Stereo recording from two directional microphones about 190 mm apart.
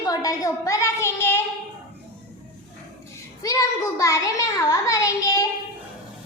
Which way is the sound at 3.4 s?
15° left (ahead or behind).